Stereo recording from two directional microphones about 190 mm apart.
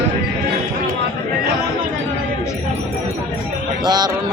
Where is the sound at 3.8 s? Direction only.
20° right (ahead or behind).